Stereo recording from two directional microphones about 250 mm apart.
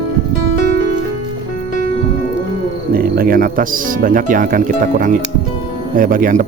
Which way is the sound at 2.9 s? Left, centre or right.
Right.